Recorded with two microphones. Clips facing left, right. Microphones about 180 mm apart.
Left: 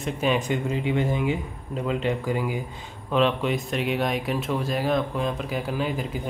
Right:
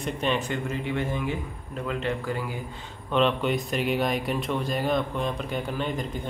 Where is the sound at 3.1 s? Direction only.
Centre (ahead or behind).